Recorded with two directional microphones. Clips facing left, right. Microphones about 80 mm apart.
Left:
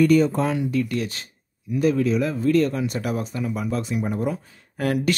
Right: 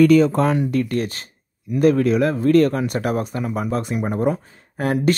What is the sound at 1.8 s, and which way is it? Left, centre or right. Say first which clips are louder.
Speech: right 4 dB; right.